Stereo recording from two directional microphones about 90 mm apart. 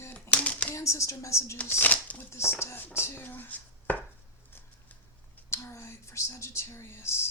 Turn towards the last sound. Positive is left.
turn(degrees=30)  # may be behind; listen again after turning